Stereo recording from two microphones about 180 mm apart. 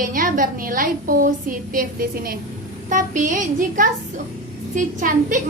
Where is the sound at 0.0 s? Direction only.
50° right (ahead or behind).